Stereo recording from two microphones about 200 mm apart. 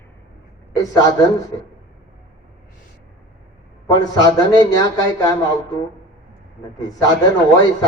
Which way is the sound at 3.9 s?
20° left (ahead or behind).